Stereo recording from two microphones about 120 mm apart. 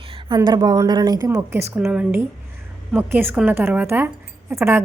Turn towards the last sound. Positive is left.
turn(degrees=-20)  # may be behind; listen again after turning